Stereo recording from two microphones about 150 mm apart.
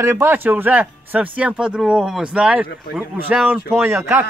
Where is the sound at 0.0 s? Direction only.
15° right (ahead or behind).